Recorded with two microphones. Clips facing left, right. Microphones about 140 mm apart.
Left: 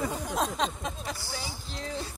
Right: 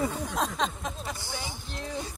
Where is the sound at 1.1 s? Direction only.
20° right (ahead or behind).